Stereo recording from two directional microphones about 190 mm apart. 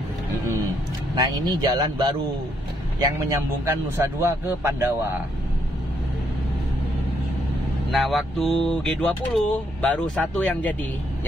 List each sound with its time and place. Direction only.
1.1 s speech: 20° right (ahead or behind)
7.9 s speech: centre (ahead or behind)